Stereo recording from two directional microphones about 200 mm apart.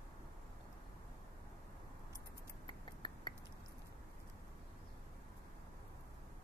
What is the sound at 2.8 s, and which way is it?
Finger snapping, 20° left (ahead or behind).